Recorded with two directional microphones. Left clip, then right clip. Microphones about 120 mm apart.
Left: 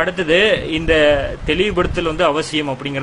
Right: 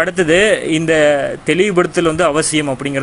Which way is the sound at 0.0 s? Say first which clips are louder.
Right 2 dB; 40° right (ahead or behind).